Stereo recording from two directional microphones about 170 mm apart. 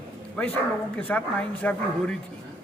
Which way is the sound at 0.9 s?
10° left (ahead or behind).